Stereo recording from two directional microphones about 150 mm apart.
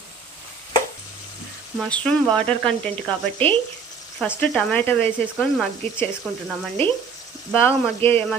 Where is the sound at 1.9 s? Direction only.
10° left (ahead or behind).